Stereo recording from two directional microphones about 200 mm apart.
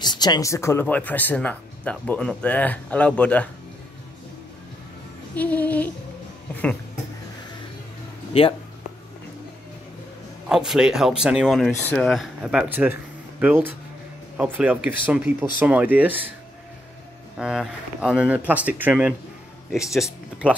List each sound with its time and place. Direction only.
0.0 s speech: 20° left (ahead or behind)
5.3 s speech: 5° left (ahead or behind)
8.3 s speech: 25° left (ahead or behind)
10.5 s speech: 5° right (ahead or behind)
17.4 s speech: 5° right (ahead or behind)